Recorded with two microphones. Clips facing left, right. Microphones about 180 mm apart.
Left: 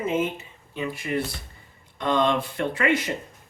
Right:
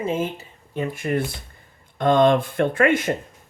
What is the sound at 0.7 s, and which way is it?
Speech, 50° right (ahead or behind).